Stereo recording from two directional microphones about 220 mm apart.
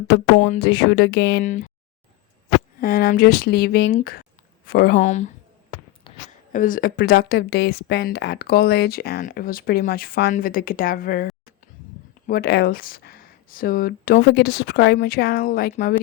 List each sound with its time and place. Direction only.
0.1 s speech: 35° left (ahead or behind)
0.6 s speech: 45° left (ahead or behind)
1.5 s speech: 35° left (ahead or behind)
2.8 s speech: 40° left (ahead or behind)
6.1 s a sound: 25° left (ahead or behind)
6.5 s speech: 35° left (ahead or behind)
12.3 s speech: 45° left (ahead or behind)